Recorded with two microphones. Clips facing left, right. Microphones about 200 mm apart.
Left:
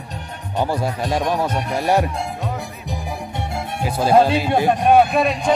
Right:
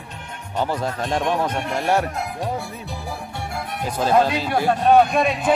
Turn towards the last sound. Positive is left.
turn(degrees=0)  # may be behind; listen again after turning